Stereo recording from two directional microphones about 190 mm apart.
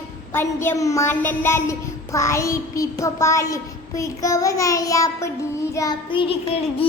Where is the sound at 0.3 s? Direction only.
10° left (ahead or behind).